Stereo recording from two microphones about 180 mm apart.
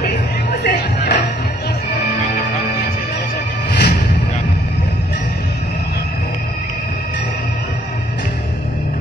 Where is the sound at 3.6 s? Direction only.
65° left (ahead or behind).